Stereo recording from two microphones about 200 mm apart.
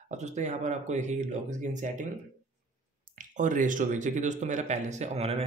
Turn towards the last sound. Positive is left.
turn(degrees=-30)  # may be behind; listen again after turning